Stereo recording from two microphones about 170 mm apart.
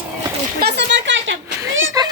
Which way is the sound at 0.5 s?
80° right.